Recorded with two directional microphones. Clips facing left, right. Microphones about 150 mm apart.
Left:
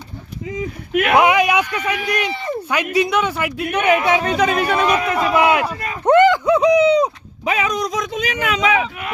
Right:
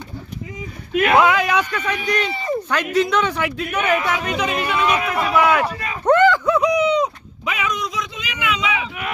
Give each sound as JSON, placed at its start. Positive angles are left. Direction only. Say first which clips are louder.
{"t": 1.1, "sound": "a man's voice", "louder": "left 2 dB", "side_deg": 15}
{"t": 3.8, "sound": "speech", "louder": "left 5 dB", "side_deg": 20}
{"t": 4.2, "sound": "speech", "louder": "left 5 dB", "side_deg": 40}
{"t": 5.4, "sound": "a man's voice", "louder": "even", "side_deg": 20}
{"t": 6.1, "sound": "a sound", "louder": "left 2 dB", "side_deg": 15}
{"t": 6.6, "sound": "speech", "louder": "left 4 dB", "side_deg": 30}